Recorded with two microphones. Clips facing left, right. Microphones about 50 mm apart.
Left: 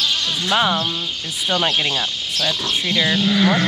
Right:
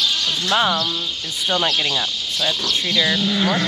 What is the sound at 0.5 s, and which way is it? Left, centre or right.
Speech, centre.